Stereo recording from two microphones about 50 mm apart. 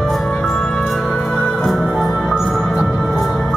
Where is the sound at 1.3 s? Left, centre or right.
Centre.